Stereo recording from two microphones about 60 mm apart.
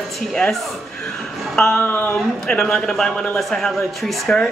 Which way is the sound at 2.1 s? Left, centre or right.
Centre.